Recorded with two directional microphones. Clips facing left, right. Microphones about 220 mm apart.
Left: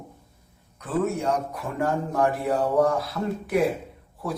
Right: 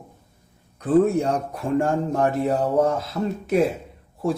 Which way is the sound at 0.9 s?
30° right (ahead or behind).